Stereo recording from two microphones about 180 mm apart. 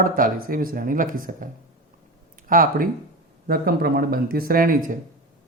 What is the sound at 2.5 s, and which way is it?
Speech, 50° right (ahead or behind).